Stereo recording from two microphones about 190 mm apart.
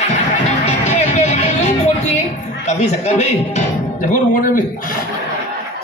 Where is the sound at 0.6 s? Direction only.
35° left (ahead or behind).